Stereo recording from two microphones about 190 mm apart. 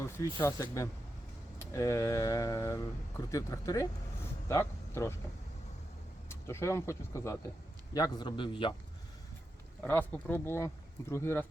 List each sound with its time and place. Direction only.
0.0 s speech: 15° left (ahead or behind)
6.2 s a man's voice: 15° left (ahead or behind)
9.8 s speech: 10° left (ahead or behind)